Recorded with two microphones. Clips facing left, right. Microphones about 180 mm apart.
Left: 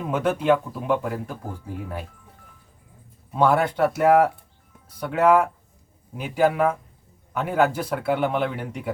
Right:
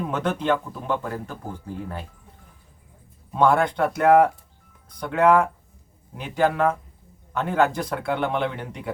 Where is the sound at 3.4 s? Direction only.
5° left (ahead or behind).